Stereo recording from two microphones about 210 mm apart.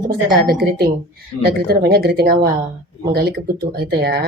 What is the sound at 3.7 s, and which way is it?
Speech, 50° right (ahead or behind).